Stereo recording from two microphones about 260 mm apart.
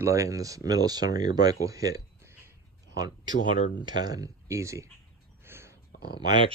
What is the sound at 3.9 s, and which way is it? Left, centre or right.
Speech, centre.